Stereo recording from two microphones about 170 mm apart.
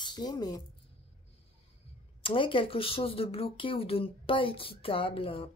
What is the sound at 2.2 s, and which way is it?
Speech, 30° left (ahead or behind).